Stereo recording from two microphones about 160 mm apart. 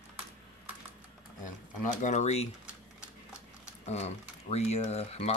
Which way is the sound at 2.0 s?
45° left (ahead or behind).